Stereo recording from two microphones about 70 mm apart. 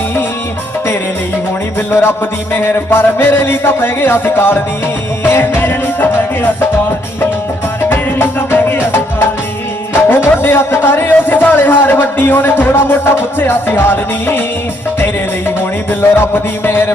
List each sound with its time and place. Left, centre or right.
1.9 s speech: left
5.2 s music: left
7.9 s music: left
10.1 s speech: left
16.0 s speech: left